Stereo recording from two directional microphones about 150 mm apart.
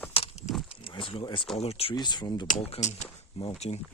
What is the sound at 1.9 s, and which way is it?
Speech, 30° left (ahead or behind).